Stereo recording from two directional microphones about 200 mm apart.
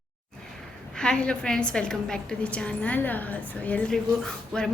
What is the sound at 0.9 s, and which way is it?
A woman's voice, 5° left (ahead or behind).